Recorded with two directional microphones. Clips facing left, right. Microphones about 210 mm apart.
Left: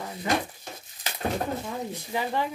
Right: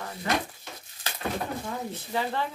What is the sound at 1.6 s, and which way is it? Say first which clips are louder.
Speech: left 1 dB; 15° left (ahead or behind).